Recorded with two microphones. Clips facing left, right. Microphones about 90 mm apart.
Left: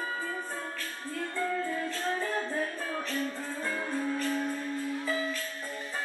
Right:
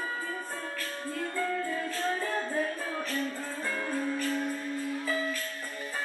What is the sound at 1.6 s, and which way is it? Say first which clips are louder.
Music: right 1 dB; centre (ahead or behind).